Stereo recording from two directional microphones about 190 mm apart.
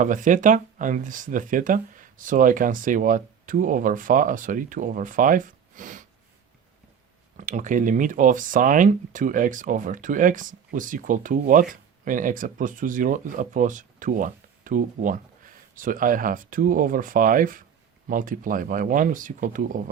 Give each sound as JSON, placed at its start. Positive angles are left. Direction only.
{"t": 0.0, "sound": "speech", "side_deg": -45}
{"t": 7.3, "sound": "speech", "side_deg": -40}